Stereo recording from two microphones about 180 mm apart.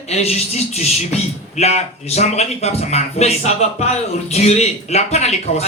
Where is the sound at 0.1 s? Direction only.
35° left (ahead or behind).